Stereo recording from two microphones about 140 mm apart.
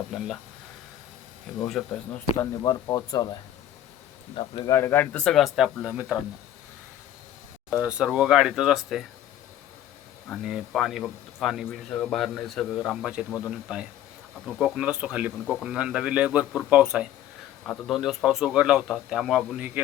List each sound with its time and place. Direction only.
0.1 s speech: centre (ahead or behind)
1.6 s speech: 5° left (ahead or behind)
2.4 s speech: 20° left (ahead or behind)
4.4 s speech: 30° left (ahead or behind)
4.7 s speech: 15° left (ahead or behind)
5.5 s speech: 5° right (ahead or behind)
7.7 s speech: 5° right (ahead or behind)
10.2 s speech: centre (ahead or behind)